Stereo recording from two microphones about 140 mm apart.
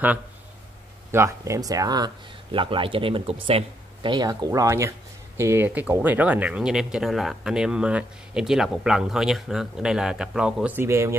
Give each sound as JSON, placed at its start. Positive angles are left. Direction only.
{"t": 1.1, "sound": "speech", "side_deg": -20}